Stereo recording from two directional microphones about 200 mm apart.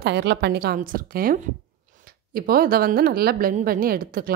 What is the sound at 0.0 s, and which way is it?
A woman's voice, 60° right (ahead or behind).